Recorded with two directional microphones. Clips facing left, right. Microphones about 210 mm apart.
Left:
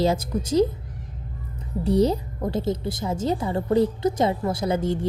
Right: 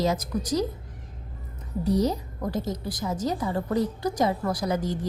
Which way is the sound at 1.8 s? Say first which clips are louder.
Left 4 dB; 30° left (ahead or behind).